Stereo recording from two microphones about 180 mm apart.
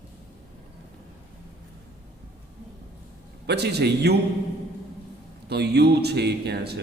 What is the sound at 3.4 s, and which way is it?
Speech, 65° right (ahead or behind).